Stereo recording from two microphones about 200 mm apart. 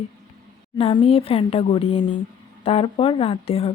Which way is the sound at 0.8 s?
30° left (ahead or behind).